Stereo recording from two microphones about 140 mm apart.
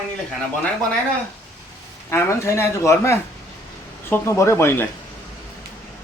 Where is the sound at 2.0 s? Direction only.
20° left (ahead or behind).